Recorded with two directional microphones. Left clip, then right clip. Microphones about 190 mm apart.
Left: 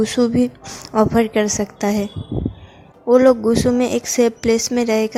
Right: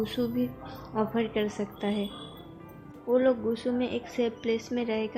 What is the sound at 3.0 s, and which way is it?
A woman's voice, 50° left (ahead or behind).